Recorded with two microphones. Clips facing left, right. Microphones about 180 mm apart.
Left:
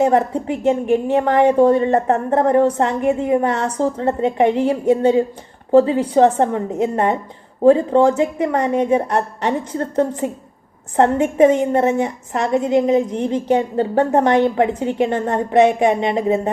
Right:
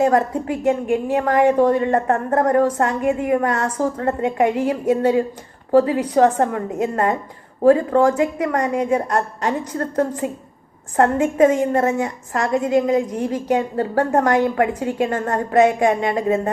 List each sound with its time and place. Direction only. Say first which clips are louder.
0.0 s a woman's voice: left 1 dB; 25° left (ahead or behind)